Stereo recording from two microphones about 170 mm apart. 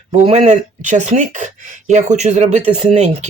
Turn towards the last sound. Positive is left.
turn(degrees=-35)  # may be behind; listen again after turning